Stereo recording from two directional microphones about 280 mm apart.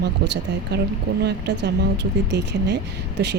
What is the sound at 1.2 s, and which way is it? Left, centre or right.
Speech, right.